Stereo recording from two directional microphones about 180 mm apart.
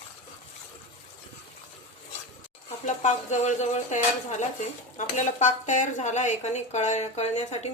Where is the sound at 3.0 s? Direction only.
40° left (ahead or behind).